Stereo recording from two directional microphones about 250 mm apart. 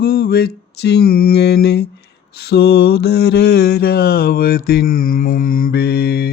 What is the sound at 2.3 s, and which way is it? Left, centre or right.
Mantra, left.